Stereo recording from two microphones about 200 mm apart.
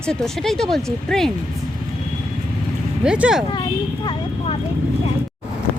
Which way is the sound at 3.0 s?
5° right (ahead or behind).